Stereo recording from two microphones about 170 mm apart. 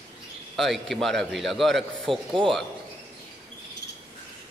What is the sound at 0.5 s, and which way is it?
A man's voice, centre (ahead or behind).